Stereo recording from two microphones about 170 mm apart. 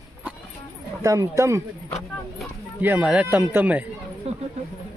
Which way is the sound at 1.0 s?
20° right (ahead or behind).